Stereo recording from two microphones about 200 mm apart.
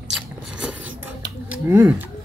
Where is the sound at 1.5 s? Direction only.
10° right (ahead or behind).